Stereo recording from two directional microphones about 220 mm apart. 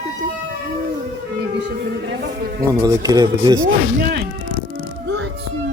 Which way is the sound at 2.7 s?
15° right (ahead or behind).